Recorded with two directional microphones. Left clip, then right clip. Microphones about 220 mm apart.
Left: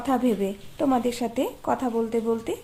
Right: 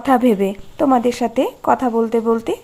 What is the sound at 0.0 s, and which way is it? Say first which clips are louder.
A woman's voice: right 9 dB; 25° right (ahead or behind).